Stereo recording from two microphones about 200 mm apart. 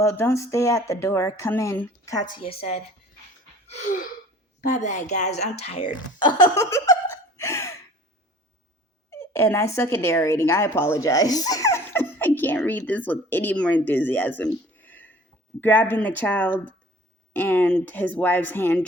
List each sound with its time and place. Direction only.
0.0 s speech: 15° left (ahead or behind)
3.7 s gasp: 35° left (ahead or behind)
4.7 s speech: 35° left (ahead or behind); by 7.8 s 15° left (ahead or behind)
9.0 s speech: 15° left (ahead or behind)